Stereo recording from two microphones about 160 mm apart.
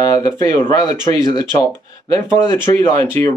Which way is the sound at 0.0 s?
20° left (ahead or behind).